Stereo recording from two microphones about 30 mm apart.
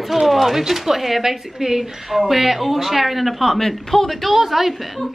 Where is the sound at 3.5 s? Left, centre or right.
Centre.